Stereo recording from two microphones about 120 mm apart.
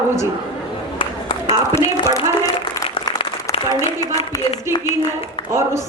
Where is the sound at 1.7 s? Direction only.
25° left (ahead or behind).